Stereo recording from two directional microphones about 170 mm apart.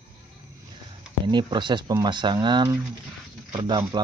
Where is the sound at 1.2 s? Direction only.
25° right (ahead or behind).